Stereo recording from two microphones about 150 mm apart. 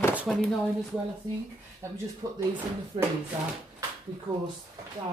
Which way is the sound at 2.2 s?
25° right (ahead or behind).